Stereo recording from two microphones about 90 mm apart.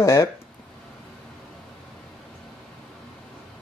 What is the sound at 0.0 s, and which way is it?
Speech, 35° left (ahead or behind).